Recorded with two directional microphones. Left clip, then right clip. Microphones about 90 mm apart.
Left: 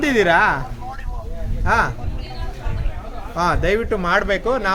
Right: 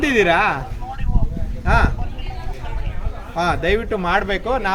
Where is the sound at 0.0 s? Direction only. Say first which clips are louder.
Left 1 dB; 20° left (ahead or behind).